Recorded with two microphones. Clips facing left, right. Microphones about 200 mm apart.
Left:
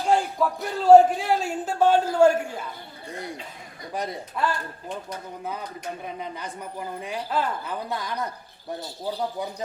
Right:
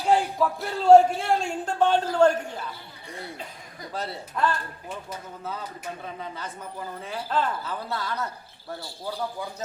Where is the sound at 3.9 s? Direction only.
15° left (ahead or behind).